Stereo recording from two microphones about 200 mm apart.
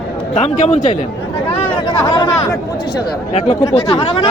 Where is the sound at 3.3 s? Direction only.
30° left (ahead or behind).